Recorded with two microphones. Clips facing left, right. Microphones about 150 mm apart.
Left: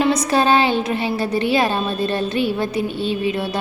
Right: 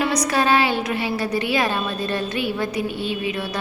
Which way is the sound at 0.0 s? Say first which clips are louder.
Left 4 dB; 25° left (ahead or behind).